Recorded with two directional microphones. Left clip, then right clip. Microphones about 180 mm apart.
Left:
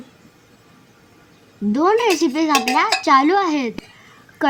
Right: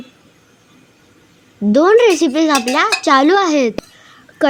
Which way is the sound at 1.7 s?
30° right (ahead or behind).